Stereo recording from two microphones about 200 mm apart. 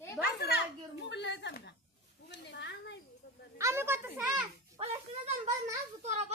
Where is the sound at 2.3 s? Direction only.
60° left (ahead or behind).